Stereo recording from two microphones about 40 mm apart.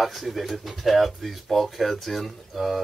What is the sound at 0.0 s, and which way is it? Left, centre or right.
Speech, centre.